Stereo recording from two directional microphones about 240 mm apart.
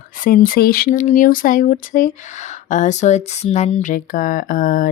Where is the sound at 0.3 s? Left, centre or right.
Left.